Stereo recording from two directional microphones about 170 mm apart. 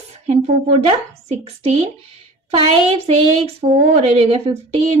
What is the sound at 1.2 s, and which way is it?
A woman's voice, 35° right (ahead or behind).